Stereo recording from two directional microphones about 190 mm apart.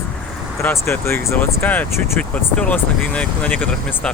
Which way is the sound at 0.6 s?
10° left (ahead or behind).